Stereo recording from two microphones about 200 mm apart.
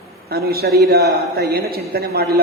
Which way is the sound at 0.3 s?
50° right (ahead or behind).